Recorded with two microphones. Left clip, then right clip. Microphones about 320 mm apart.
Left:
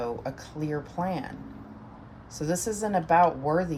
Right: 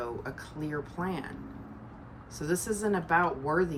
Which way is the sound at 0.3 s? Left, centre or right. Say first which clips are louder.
Left 3 dB; left.